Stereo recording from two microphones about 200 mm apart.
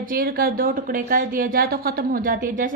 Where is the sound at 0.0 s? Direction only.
45° right (ahead or behind).